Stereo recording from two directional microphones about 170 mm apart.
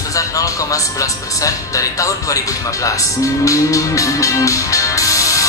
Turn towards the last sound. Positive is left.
turn(degrees=20)  # may be behind; listen again after turning